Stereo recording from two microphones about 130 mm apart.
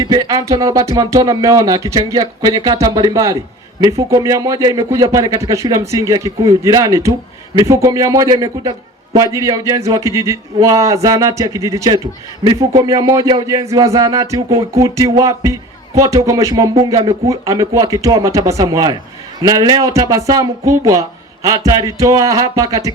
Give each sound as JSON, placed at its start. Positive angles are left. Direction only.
{"t": 0.0, "sound": "a man's voice", "side_deg": -30}